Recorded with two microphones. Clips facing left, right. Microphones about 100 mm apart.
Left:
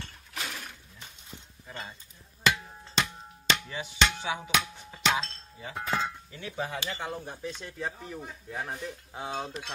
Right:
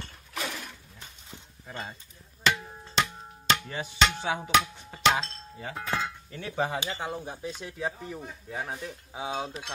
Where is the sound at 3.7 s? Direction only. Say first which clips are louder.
Right 2 dB; 45° right (ahead or behind).